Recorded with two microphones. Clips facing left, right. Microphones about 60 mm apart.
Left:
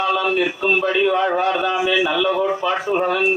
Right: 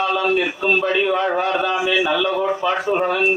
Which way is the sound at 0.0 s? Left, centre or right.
Centre.